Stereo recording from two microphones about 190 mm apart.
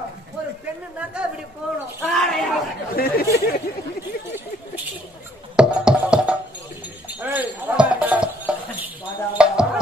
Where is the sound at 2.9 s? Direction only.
55° left (ahead or behind).